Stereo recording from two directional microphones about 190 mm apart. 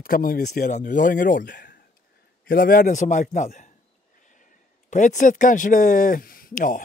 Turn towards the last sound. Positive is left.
turn(degrees=45)  # may be behind; listen again after turning